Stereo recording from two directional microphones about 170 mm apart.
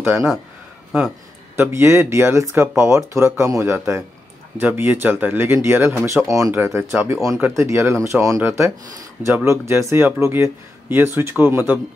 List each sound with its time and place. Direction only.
0.1 s speech: centre (ahead or behind)
1.6 s speech: 15° right (ahead or behind)
7.2 s speech: 5° right (ahead or behind)